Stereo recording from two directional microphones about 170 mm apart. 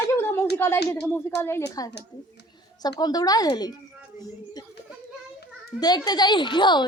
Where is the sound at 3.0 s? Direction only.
20° left (ahead or behind).